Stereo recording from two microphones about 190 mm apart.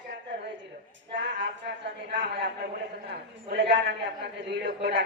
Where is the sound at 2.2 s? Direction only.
60° right (ahead or behind).